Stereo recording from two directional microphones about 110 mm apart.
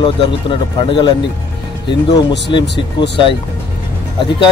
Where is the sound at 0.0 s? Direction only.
50° left (ahead or behind).